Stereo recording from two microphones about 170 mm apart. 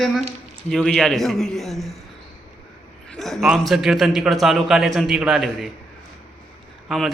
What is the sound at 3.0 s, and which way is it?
A man's voice, centre (ahead or behind).